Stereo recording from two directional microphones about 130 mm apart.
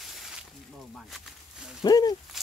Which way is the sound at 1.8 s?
30° left (ahead or behind).